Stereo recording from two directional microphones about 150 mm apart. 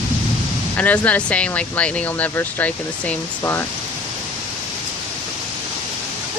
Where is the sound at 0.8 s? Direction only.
10° left (ahead or behind).